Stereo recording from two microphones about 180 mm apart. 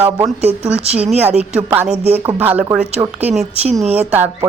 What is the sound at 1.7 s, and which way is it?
A woman's voice, 10° right (ahead or behind).